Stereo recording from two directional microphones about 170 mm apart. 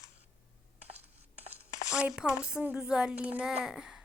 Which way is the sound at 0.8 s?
40° right (ahead or behind).